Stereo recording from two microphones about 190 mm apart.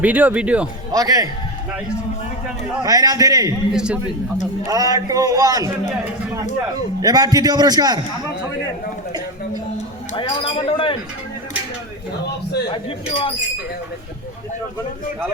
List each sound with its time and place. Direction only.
0.0 s speech: 10° right (ahead or behind)
0.9 s a man's voice: 20° right (ahead or behind)
2.8 s a man's voice: 20° right (ahead or behind)
3.7 s a man's voice: 5° right (ahead or behind)
4.6 s a man's voice: 20° right (ahead or behind)
7.0 s a man's voice: 20° right (ahead or behind)
9.7 s a man's voice: 30° left (ahead or behind)
12.7 s speech: 30° left (ahead or behind)